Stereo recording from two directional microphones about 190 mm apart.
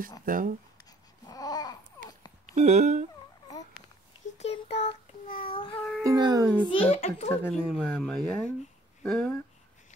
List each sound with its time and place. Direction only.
0.2 s speech: 45° right (ahead or behind)
1.2 s babbling: 20° left (ahead or behind)
2.4 s speech: 35° right (ahead or behind)
4.4 s child singing: 35° left (ahead or behind)
5.8 s a sound: 5° left (ahead or behind)
6.0 s speech: 20° right (ahead or behind)
6.7 s a child's voice: 30° left (ahead or behind)
7.5 s speech: centre (ahead or behind)